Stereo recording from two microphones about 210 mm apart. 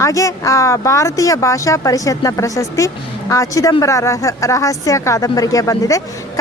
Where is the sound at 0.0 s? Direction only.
15° left (ahead or behind).